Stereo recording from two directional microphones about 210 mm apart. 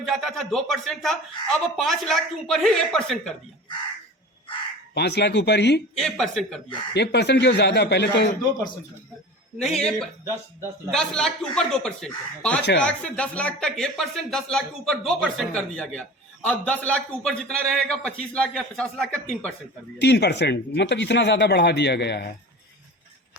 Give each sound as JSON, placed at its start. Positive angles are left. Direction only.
{"t": 0.0, "sound": "a man's voice", "side_deg": 0}
{"t": 4.9, "sound": "speech", "side_deg": 55}
{"t": 6.0, "sound": "a man's voice", "side_deg": 0}
{"t": 6.9, "sound": "speech", "side_deg": 55}
{"t": 9.7, "sound": "a man's voice", "side_deg": 5}
{"t": 20.0, "sound": "speech", "side_deg": 55}